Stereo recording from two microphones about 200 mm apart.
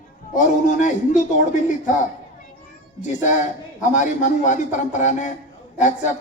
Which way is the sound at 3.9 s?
40° left (ahead or behind).